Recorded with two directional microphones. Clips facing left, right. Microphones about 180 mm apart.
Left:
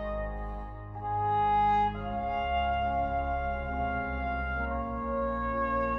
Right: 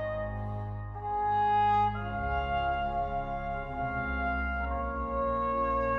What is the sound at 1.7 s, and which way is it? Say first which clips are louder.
Music: even; 20° left (ahead or behind).